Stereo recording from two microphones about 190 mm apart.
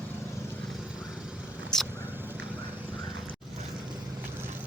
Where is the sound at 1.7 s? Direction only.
5° left (ahead or behind).